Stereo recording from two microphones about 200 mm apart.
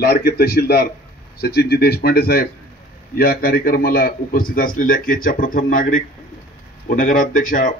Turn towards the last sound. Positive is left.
turn(degrees=40)  # may be behind; listen again after turning